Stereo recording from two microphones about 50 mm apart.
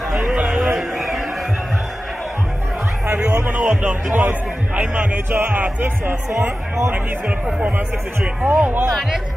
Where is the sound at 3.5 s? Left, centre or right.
Right.